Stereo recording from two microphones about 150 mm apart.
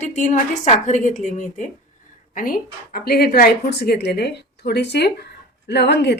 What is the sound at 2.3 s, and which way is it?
Speech, 70° left (ahead or behind).